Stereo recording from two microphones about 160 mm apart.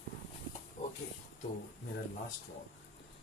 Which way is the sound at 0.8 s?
45° left (ahead or behind).